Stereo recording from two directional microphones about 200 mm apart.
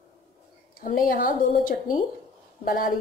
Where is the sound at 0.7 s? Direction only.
45° left (ahead or behind).